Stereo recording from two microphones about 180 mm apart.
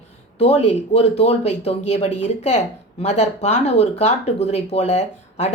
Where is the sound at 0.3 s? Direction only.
35° left (ahead or behind).